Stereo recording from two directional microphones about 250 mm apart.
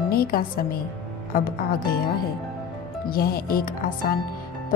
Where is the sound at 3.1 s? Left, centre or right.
Left.